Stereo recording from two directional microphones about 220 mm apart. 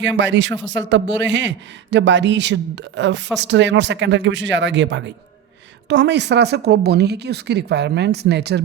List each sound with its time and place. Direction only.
0.0 s speech: 55° right (ahead or behind)